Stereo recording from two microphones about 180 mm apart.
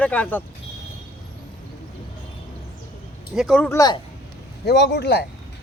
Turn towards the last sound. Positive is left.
turn(degrees=65)  # may be behind; listen again after turning